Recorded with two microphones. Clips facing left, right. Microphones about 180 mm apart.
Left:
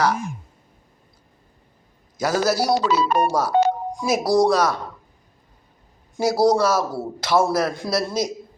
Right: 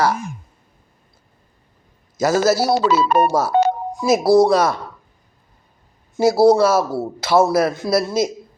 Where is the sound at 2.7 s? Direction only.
50° right (ahead or behind).